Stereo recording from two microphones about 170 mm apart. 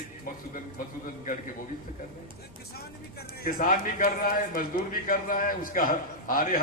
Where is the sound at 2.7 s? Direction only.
60° left (ahead or behind).